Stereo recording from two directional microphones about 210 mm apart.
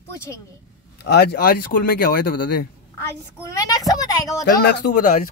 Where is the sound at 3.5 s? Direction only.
15° left (ahead or behind).